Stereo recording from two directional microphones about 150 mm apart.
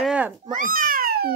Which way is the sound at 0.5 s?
65° right (ahead or behind).